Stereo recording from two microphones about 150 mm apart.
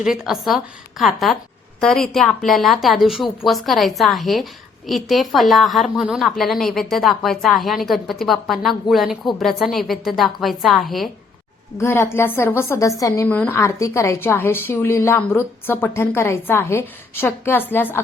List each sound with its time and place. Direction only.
0.0 s a woman's voice: 5° right (ahead or behind)
11.8 s a woman's voice: 15° left (ahead or behind)